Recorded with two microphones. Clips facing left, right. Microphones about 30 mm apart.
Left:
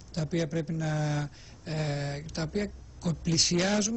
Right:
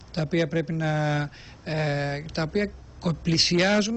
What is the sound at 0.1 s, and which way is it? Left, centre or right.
Speech, right.